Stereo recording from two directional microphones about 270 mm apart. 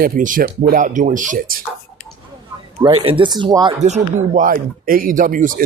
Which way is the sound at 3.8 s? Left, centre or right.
Right.